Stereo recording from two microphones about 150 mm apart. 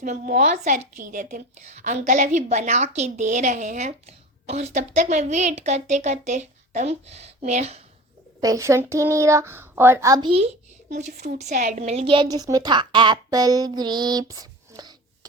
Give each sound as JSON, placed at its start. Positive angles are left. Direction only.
{"t": 0.0, "sound": "a woman's voice", "side_deg": -55}
{"t": 8.4, "sound": "speech", "side_deg": -20}
{"t": 10.2, "sound": "a woman's voice", "side_deg": -40}
{"t": 10.8, "sound": "a woman's voice", "side_deg": -55}